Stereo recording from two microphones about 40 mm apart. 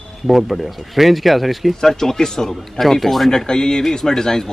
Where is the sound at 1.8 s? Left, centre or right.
Centre.